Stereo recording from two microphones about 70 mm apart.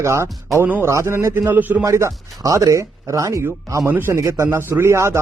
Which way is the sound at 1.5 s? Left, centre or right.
Right.